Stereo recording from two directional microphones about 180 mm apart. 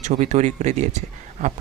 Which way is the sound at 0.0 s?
40° right (ahead or behind).